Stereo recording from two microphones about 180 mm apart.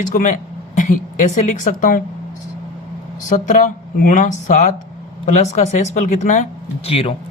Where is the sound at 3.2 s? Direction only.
45° left (ahead or behind).